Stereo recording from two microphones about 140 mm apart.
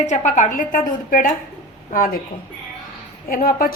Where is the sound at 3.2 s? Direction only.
90° left.